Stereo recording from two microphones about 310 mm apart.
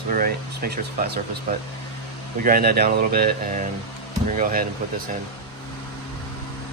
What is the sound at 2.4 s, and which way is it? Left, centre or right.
Speech, right.